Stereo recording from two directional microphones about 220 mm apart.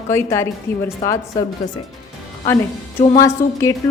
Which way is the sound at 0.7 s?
40° left (ahead or behind).